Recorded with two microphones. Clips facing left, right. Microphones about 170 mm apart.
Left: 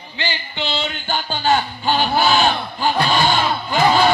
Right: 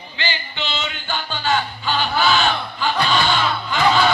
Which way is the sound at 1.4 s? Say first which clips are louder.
Left 4 dB; 45° left (ahead or behind).